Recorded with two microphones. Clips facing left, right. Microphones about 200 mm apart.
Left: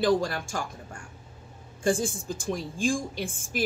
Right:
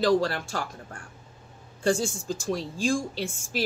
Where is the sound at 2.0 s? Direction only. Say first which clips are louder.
Right 1 dB; 55° left (ahead or behind).